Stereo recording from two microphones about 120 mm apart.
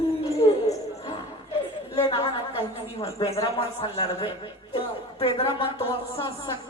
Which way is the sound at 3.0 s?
55° left (ahead or behind).